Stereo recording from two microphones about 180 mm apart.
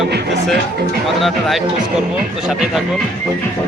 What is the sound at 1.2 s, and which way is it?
Speech, centre (ahead or behind).